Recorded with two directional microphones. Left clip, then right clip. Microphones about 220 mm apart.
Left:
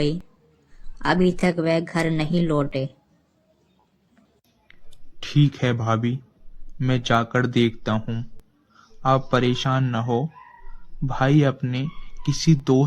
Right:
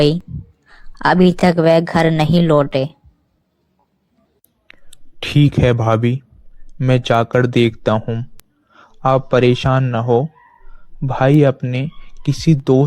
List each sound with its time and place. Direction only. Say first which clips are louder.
0.9 s speech: right 8 dB; 30° right (ahead or behind)
4.7 s whispering: right 9 dB; 35° right (ahead or behind)
5.5 s speech: right 9 dB; 35° right (ahead or behind)
8.0 s speech: right 9 dB; 20° right (ahead or behind)
8.7 s a man's voice: right 6 dB; 30° right (ahead or behind)